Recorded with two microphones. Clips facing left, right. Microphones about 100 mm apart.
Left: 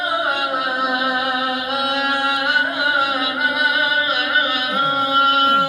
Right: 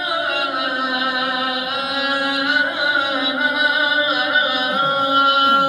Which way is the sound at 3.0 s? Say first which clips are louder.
Even; 5° left (ahead or behind).